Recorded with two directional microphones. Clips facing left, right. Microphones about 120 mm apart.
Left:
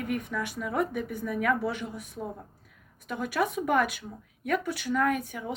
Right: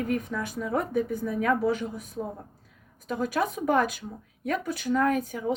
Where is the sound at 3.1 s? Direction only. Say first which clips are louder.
Right 1 dB; 35° right (ahead or behind).